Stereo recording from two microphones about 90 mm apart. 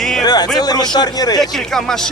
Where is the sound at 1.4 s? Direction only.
5° left (ahead or behind).